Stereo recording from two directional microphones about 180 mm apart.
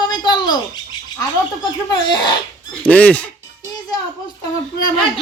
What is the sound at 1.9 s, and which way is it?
Speech, 25° left (ahead or behind).